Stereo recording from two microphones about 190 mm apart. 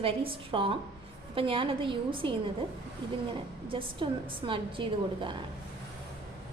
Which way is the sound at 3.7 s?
25° right (ahead or behind).